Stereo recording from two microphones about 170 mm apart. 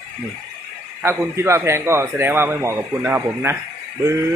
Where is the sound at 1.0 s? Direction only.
15° right (ahead or behind).